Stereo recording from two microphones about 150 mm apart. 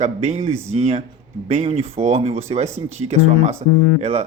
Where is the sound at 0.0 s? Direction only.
45° right (ahead or behind).